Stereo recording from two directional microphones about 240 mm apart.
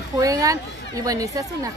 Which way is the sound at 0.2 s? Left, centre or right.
Centre.